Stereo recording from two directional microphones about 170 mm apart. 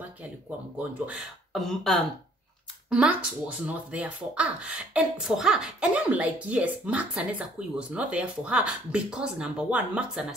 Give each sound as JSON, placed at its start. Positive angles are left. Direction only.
{"t": 1.0, "sound": "speech", "side_deg": 0}